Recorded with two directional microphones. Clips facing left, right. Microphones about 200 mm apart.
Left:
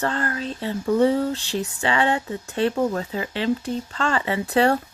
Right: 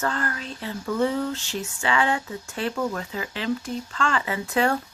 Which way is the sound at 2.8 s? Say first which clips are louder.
Left 4 dB; 35° left (ahead or behind).